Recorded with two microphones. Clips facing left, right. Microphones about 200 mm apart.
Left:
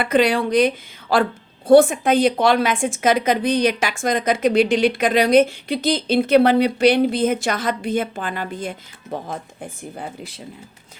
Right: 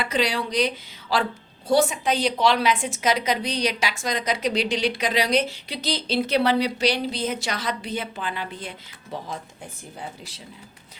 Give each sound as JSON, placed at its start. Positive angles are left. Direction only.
{"t": 0.0, "sound": "a woman's voice", "side_deg": 55}